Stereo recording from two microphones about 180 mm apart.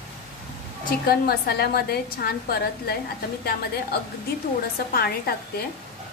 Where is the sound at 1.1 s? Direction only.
60° left (ahead or behind).